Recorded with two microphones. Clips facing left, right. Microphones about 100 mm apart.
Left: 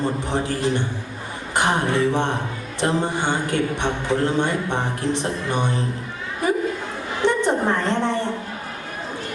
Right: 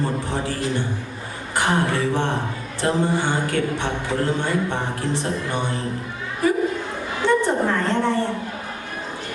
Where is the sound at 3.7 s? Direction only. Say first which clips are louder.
Left 2 dB; 20° left (ahead or behind).